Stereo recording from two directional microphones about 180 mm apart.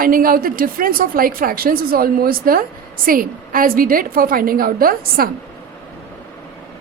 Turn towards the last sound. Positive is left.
turn(degrees=-55)  # may be behind; listen again after turning